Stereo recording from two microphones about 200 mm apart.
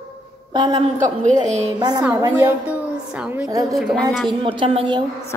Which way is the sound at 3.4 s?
15° right (ahead or behind).